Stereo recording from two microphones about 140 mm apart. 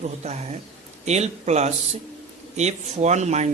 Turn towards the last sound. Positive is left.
turn(degrees=-55)  # may be behind; listen again after turning